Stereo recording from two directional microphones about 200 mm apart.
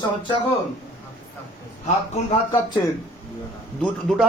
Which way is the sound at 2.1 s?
35° left (ahead or behind).